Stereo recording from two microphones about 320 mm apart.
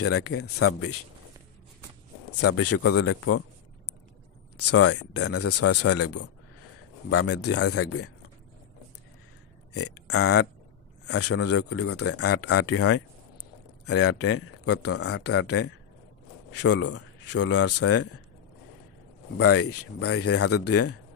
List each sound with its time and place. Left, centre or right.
0.0 s speech: left
2.4 s speech: left
4.6 s speech: left
10.0 s speech: left
19.3 s speech: left